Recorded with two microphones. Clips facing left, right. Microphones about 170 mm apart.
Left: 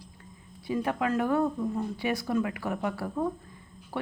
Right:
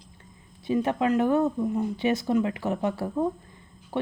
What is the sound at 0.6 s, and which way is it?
Speech, 25° right (ahead or behind).